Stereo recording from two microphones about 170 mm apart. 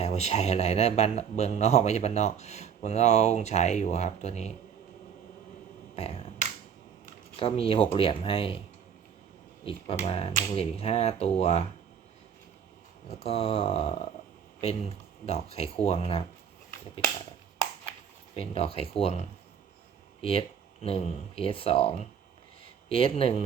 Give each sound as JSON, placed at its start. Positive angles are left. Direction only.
{"t": 0.0, "sound": "a man's voice", "side_deg": 40}
{"t": 7.3, "sound": "a man's voice", "side_deg": 35}
{"t": 9.6, "sound": "a man's voice", "side_deg": 35}
{"t": 13.2, "sound": "a man's voice", "side_deg": 35}
{"t": 18.3, "sound": "a man's voice", "side_deg": 35}
{"t": 20.8, "sound": "a man's voice", "side_deg": 35}